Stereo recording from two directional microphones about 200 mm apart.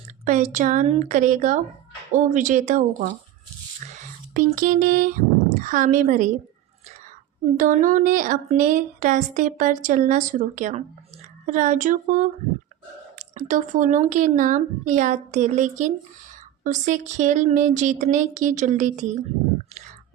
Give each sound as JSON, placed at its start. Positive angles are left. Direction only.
{"t": 0.3, "sound": "speech", "side_deg": -35}
{"t": 3.8, "sound": "whispering", "side_deg": -35}
{"t": 4.4, "sound": "speech", "side_deg": -45}
{"t": 7.5, "sound": "speech", "side_deg": -40}